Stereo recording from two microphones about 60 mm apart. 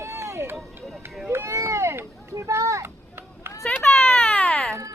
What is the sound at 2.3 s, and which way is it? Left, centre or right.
Children playing, right.